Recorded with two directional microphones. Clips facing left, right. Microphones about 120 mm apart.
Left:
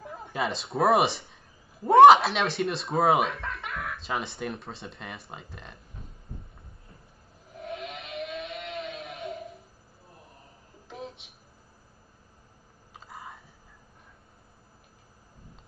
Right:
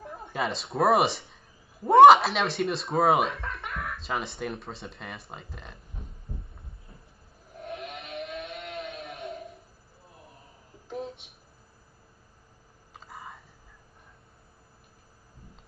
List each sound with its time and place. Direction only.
0.0 s a woman's voice: centre (ahead or behind)
7.7 s vehicle: centre (ahead or behind)
12.9 s a sound: centre (ahead or behind)